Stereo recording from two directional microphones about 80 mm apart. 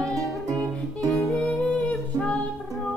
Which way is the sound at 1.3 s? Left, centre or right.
Centre.